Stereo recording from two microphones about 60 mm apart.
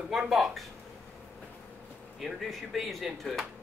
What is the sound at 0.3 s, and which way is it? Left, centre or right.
Speech, centre.